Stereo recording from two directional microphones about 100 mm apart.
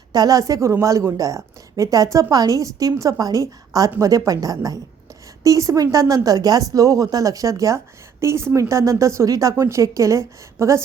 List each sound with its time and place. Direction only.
0.1 s a woman's voice: 40° right (ahead or behind)